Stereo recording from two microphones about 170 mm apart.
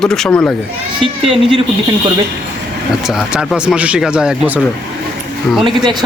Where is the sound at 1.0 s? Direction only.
30° right (ahead or behind).